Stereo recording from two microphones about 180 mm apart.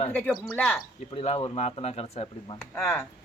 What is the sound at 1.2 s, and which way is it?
Speech, 30° left (ahead or behind).